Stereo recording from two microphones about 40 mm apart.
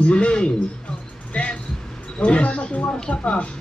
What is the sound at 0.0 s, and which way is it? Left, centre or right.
A man's voice, left.